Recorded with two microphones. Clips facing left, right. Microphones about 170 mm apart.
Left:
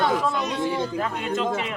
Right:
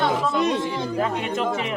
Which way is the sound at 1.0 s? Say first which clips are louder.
Right 2 dB; 20° right (ahead or behind).